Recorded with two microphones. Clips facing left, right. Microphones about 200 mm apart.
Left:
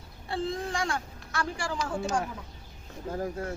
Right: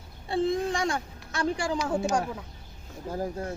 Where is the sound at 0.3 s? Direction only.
20° right (ahead or behind).